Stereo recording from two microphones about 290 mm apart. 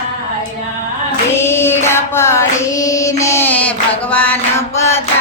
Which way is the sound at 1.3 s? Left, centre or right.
Centre.